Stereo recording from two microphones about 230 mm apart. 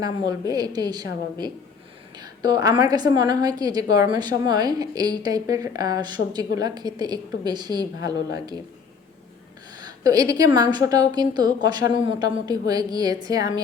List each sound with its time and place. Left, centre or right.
0.0 s a woman's voice: centre
9.7 s a woman's voice: centre